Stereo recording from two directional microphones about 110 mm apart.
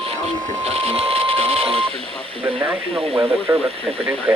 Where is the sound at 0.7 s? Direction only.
65° right (ahead or behind).